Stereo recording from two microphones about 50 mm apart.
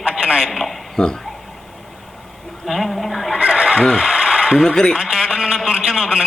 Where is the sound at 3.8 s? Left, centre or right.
Centre.